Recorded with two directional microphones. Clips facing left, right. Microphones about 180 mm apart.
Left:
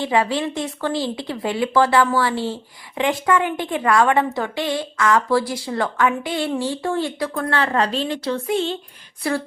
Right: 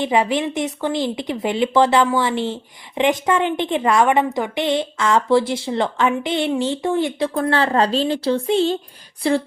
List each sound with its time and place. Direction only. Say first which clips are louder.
0.0 s speech: right 2 dB; 20° right (ahead or behind)